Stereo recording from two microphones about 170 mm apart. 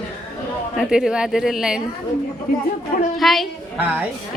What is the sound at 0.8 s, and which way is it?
A woman's voice, 5° right (ahead or behind).